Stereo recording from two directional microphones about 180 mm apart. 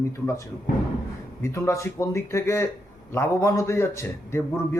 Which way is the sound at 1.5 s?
15° left (ahead or behind).